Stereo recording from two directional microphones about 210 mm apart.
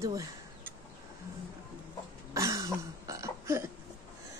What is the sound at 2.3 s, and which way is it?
Burping, 15° right (ahead or behind).